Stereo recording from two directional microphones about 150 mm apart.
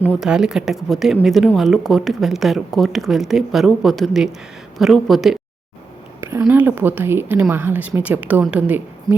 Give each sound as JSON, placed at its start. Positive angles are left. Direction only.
{"t": 0.2, "sound": "speech", "side_deg": -5}
{"t": 6.1, "sound": "a sound", "side_deg": -15}
{"t": 6.5, "sound": "a woman's voice", "side_deg": -10}